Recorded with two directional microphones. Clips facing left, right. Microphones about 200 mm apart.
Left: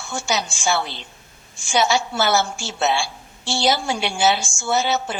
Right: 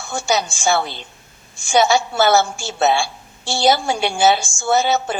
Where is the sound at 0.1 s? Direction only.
50° right (ahead or behind).